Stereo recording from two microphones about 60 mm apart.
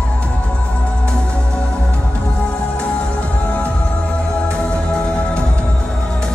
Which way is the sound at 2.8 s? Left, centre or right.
Left.